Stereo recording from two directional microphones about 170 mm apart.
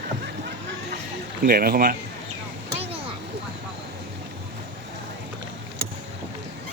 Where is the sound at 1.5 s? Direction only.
60° right (ahead or behind).